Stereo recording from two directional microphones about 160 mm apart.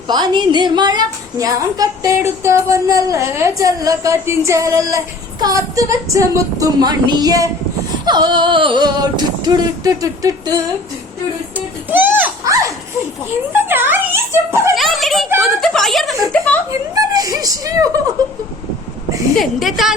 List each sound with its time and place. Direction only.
0.1 s a woman's voice: 30° right (ahead or behind)
11.5 s music: 10° right (ahead or behind)
13.5 s a sound: 15° right (ahead or behind)
14.5 s speech: 15° right (ahead or behind)
14.8 s speech: centre (ahead or behind)
16.9 s a woman's voice: 20° right (ahead or behind)
19.4 s speech: centre (ahead or behind)